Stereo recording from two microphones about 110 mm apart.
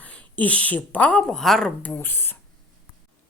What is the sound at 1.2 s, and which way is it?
Speech, 5° left (ahead or behind).